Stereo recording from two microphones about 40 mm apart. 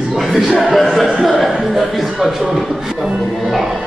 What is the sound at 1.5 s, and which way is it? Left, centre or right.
Chuckle, centre.